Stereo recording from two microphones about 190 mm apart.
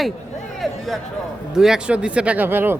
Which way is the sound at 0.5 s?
Centre (ahead or behind).